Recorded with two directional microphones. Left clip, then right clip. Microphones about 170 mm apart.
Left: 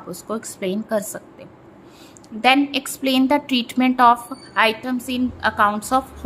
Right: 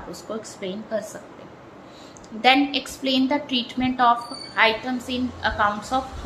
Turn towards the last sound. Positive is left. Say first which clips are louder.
# left 4 dB
turn(degrees=55)  # may be behind; listen again after turning